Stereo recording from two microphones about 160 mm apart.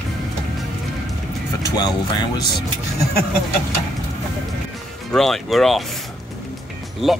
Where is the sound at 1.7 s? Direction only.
25° left (ahead or behind).